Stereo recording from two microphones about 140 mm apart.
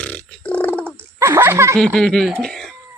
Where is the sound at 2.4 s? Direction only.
5° left (ahead or behind).